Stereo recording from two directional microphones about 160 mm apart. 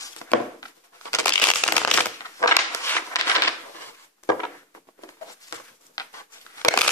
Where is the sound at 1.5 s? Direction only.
10° left (ahead or behind).